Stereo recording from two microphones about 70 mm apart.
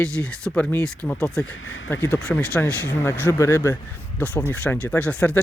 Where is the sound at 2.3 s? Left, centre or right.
Centre.